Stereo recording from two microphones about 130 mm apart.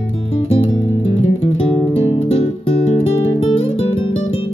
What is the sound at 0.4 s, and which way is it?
Music, 45° left (ahead or behind).